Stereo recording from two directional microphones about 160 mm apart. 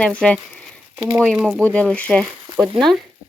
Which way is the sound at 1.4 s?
5° left (ahead or behind).